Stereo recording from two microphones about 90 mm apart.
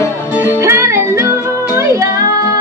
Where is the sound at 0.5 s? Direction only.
30° right (ahead or behind).